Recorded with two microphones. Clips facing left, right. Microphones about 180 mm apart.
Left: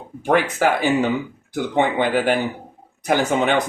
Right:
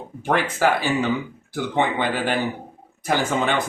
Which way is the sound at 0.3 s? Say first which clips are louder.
Left 2 dB; 15° left (ahead or behind).